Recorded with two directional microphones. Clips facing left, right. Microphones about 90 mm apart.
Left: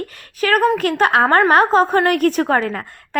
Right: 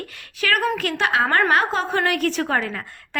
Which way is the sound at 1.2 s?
35° left (ahead or behind).